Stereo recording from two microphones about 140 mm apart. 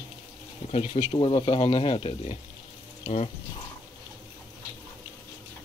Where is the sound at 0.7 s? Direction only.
50° left (ahead or behind).